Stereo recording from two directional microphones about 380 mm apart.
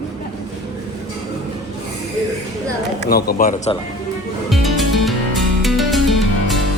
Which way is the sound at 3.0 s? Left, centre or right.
Left.